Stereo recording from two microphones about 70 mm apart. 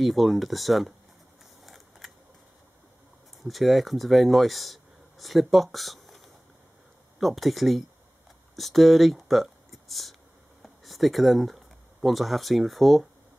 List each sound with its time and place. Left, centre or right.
0.0 s speech: centre
1.6 s a sound: centre
3.4 s speech: centre